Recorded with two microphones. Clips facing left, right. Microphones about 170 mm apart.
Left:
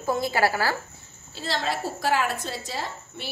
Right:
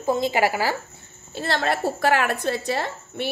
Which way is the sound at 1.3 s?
60° right (ahead or behind).